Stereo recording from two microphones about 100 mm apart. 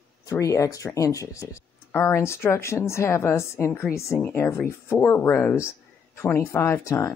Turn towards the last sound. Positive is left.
turn(degrees=25)  # may be behind; listen again after turning